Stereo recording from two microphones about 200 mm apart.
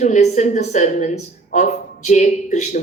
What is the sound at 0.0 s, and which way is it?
A woman's voice, 35° left (ahead or behind).